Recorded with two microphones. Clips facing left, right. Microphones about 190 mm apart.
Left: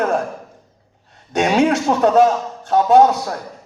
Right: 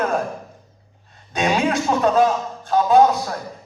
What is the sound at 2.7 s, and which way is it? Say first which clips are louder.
Speech: left 2 dB; 70° left (ahead or behind).